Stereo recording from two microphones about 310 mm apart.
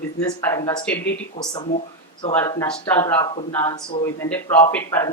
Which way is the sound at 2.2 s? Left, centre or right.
Centre.